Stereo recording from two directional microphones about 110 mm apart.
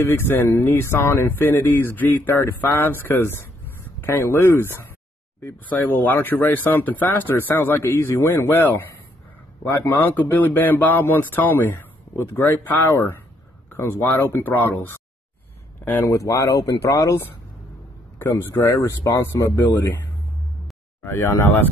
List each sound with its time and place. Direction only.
0.0 s speech: 20° left (ahead or behind)
9.8 s speech: 20° left (ahead or behind)
16.0 s speech: 25° left (ahead or behind)
18.3 s speech: 30° left (ahead or behind)
21.0 s speech: 25° left (ahead or behind)